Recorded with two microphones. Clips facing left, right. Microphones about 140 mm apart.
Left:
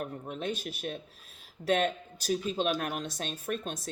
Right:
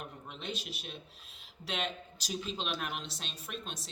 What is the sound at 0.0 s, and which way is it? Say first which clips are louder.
Speech: left 8 dB; 50° left (ahead or behind).